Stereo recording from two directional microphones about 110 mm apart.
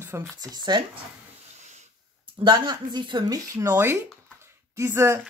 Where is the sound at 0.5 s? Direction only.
40° right (ahead or behind).